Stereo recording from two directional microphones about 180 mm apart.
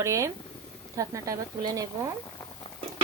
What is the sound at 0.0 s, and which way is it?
Speech, 15° right (ahead or behind).